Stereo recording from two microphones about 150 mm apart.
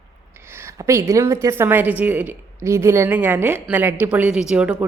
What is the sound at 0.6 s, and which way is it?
A woman's voice, 20° right (ahead or behind).